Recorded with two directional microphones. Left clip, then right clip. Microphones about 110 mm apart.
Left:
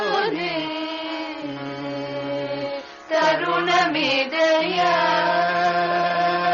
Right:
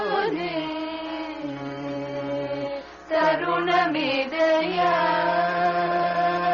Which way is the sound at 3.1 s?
35° right (ahead or behind).